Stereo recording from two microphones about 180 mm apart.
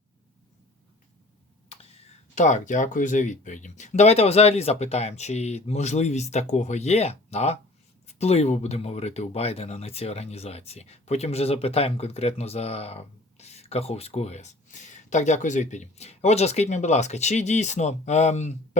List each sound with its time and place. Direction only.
2.3 s speech: 45° left (ahead or behind)